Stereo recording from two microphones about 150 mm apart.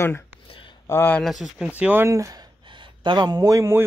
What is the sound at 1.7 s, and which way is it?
Speech, 10° right (ahead or behind).